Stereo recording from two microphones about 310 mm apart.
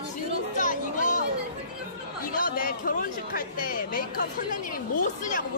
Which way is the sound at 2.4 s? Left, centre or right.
Left.